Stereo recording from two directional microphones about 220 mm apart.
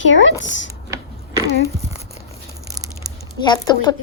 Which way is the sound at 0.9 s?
15° right (ahead or behind).